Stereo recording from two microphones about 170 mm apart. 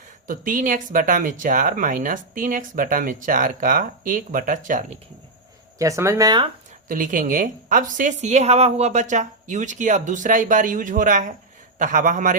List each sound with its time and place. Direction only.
0.3 s speech: 50° right (ahead or behind)
5.8 s speech: 20° right (ahead or behind)
6.8 s speech: 50° right (ahead or behind)